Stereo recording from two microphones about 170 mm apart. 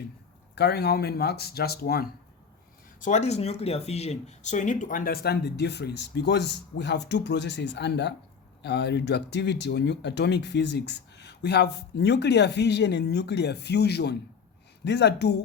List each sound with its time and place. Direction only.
0.5 s speech: 75° left (ahead or behind)
3.0 s speech: 45° left (ahead or behind); by 14.2 s 75° left (ahead or behind)
14.8 s speech: 90° left